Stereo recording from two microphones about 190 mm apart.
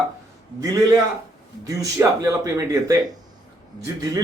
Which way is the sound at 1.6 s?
20° right (ahead or behind).